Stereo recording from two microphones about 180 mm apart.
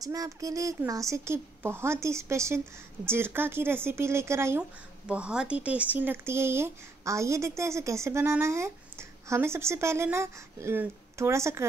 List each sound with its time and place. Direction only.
0.0 s speech: 20° right (ahead or behind)